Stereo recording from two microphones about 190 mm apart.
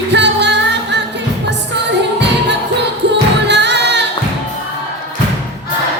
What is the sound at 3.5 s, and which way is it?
Music, 65° right (ahead or behind).